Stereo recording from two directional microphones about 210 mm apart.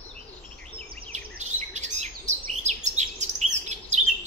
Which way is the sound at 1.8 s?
35° right (ahead or behind).